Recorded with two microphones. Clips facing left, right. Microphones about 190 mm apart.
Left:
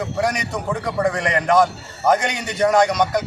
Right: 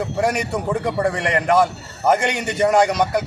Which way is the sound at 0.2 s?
10° right (ahead or behind).